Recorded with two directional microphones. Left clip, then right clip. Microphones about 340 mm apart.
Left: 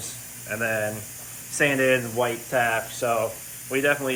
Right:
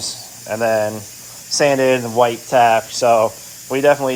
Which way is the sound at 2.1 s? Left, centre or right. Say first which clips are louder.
Right 10 dB; right.